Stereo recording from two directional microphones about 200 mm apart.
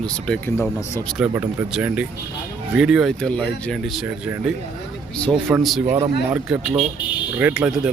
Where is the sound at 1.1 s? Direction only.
5° right (ahead or behind).